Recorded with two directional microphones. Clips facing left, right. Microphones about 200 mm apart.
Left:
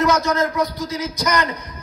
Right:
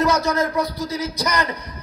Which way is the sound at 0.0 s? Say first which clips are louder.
Left 1 dB; 35° right (ahead or behind).